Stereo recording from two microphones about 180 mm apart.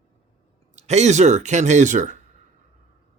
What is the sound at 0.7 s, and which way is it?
Mantra, 40° right (ahead or behind).